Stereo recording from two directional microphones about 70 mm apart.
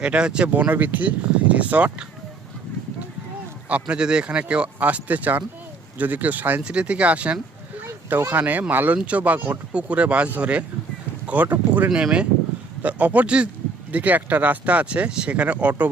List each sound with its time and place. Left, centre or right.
0.0 s speech: centre
3.7 s speech: centre
11.9 s speech: centre